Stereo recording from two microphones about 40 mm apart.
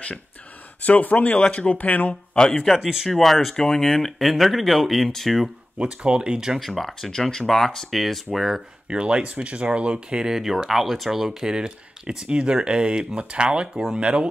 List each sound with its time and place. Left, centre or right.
0.8 s speech: left
1.7 s speech: left
2.3 s speech: centre
3.5 s speech: centre
5.8 s speech: right
6.6 s speech: centre
7.1 s speech: centre
7.4 s speech: centre
8.8 s speech: right
10.3 s speech: centre; by 14.2 s right